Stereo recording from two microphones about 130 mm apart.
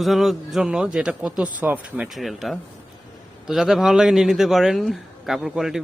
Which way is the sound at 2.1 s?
Centre (ahead or behind).